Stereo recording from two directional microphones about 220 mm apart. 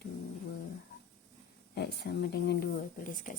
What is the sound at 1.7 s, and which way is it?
Speech, 50° left (ahead or behind).